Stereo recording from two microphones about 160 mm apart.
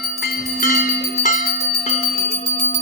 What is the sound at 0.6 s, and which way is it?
Music, 60° left (ahead or behind).